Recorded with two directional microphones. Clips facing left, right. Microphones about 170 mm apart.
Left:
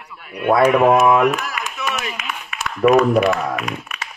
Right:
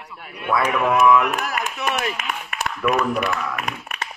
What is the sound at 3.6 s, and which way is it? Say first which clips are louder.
Speech: left 2 dB; 55° right (ahead or behind).